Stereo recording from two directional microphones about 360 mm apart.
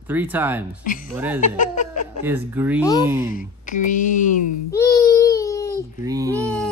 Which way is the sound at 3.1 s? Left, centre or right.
Centre.